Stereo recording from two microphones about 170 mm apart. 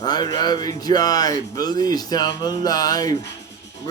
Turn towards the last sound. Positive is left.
turn(degrees=20)  # may be behind; listen again after turning